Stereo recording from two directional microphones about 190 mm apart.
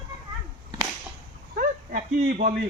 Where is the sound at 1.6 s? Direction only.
45° right (ahead or behind).